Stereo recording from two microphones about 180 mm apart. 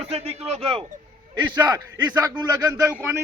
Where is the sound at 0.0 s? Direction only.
35° right (ahead or behind).